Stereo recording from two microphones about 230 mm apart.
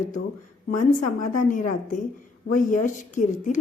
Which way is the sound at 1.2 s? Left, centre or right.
Left.